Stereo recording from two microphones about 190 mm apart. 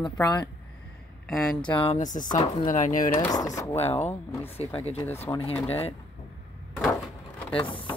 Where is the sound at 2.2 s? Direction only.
20° left (ahead or behind).